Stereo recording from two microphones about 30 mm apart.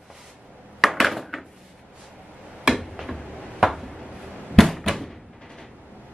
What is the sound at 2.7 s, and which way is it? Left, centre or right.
Tick-tock, centre.